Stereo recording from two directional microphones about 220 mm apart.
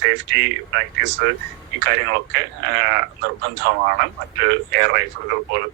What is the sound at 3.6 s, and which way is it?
Speech, 50° right (ahead or behind).